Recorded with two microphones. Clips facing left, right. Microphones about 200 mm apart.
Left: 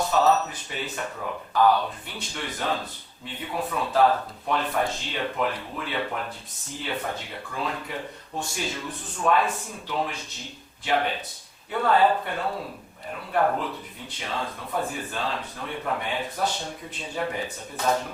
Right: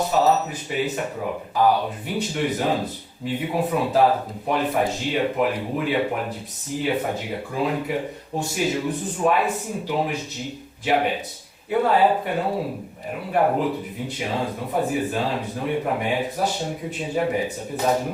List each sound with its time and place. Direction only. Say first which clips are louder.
0.0 s speech: right 2 dB; 15° right (ahead or behind)
9.2 s speech: right 2 dB; 15° right (ahead or behind)